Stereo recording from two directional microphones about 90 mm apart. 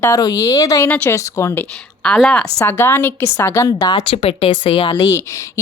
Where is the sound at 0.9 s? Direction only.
20° left (ahead or behind).